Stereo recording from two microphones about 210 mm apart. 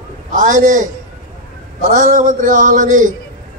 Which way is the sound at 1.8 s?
35° right (ahead or behind).